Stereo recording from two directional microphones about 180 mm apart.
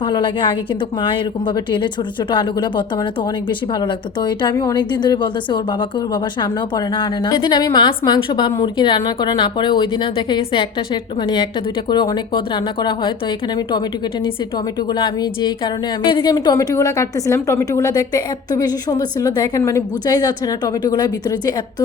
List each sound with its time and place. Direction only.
0.0 s speech: 25° left (ahead or behind)